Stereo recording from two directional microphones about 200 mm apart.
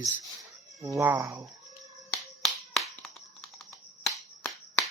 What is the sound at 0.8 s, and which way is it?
Speech, 15° right (ahead or behind).